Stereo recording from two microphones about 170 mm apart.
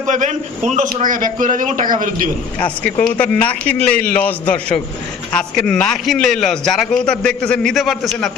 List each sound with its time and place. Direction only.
0.0 s a man's voice: 45° right (ahead or behind)
2.6 s a man's voice: 10° left (ahead or behind)